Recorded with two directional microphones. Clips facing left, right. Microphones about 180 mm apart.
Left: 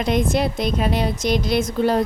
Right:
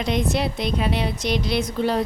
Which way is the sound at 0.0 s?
50° left (ahead or behind).